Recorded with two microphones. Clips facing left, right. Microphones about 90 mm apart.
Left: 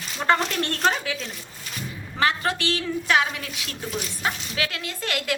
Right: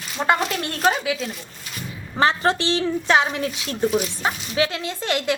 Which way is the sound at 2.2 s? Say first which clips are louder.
Right 4 dB; 30° right (ahead or behind).